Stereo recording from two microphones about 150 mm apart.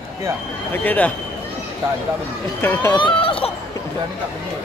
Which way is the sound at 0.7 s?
10° left (ahead or behind).